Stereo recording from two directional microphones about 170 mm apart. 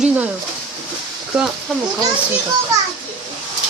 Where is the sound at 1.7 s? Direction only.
Centre (ahead or behind).